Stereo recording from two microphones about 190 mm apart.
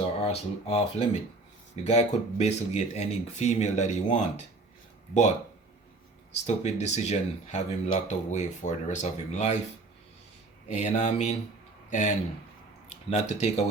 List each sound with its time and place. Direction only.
0.0 s speech: 30° left (ahead or behind)
6.4 s speech: 35° left (ahead or behind)
10.7 s speech: 40° left (ahead or behind)